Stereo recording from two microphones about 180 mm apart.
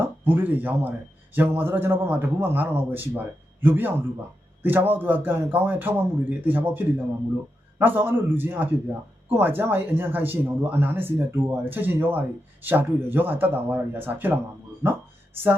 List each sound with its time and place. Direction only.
0.3 s speech: 10° right (ahead or behind)